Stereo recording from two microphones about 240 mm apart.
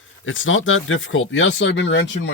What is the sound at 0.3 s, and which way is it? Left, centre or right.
Speech, left.